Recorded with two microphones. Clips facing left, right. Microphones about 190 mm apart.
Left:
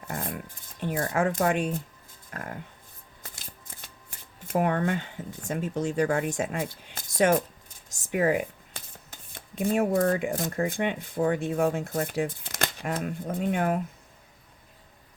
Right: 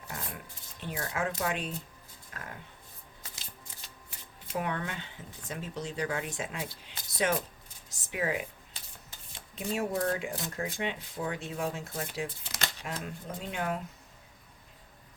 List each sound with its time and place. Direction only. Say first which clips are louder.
0.1 s music: left 8 dB; 50° left (ahead or behind)
0.8 s speech: left 8 dB; 50° left (ahead or behind)
7.9 s a sound: left 8 dB; 50° left (ahead or behind)
9.6 s speech: left 8 dB; 50° left (ahead or behind)